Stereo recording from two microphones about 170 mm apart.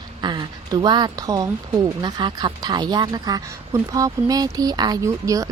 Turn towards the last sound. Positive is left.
turn(degrees=-20)  # may be behind; listen again after turning